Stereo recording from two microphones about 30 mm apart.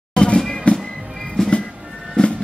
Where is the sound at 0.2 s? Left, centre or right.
Left.